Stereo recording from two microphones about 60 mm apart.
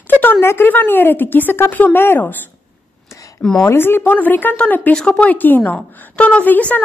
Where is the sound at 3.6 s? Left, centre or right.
Left.